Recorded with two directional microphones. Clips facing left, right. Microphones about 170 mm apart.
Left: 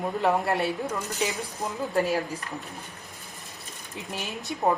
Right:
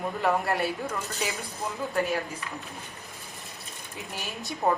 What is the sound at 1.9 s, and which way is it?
Speech, 40° left (ahead or behind).